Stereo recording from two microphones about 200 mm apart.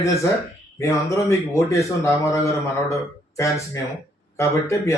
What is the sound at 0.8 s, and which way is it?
Speech, 15° left (ahead or behind).